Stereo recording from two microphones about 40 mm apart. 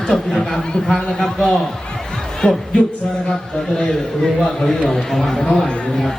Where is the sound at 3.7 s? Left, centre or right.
Left.